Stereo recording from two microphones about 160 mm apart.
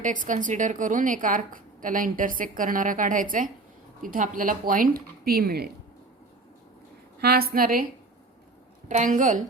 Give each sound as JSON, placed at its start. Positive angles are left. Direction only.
{"t": 0.0, "sound": "a woman's voice", "side_deg": -55}
{"t": 7.2, "sound": "a woman's voice", "side_deg": -75}
{"t": 8.9, "sound": "a woman's voice", "side_deg": -50}